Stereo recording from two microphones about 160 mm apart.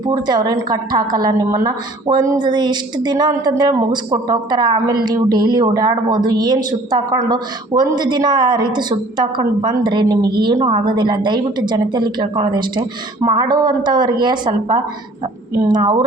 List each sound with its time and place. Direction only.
0.0 s speech: 25° right (ahead or behind)